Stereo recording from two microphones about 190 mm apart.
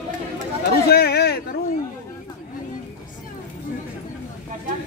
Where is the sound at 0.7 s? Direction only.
55° left (ahead or behind).